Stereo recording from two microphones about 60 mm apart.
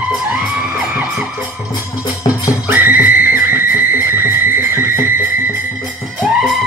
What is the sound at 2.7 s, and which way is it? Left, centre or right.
Music, right.